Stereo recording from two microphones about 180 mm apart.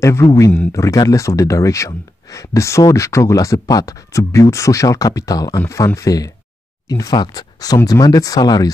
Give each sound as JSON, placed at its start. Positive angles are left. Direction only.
{"t": 0.0, "sound": "speech", "side_deg": 15}